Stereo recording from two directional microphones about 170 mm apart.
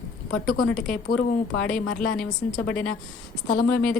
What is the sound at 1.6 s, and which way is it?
Speech, 5° left (ahead or behind).